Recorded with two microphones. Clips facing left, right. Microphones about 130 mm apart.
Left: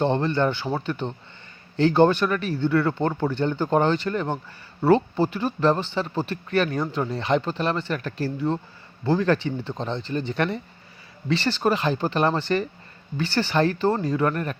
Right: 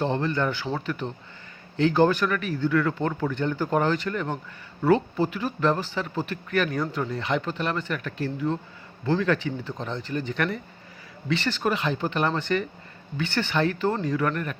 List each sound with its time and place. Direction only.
0.0 s speech: 30° left (ahead or behind)